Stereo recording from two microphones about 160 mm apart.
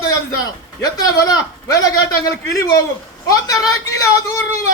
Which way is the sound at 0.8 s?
25° left (ahead or behind).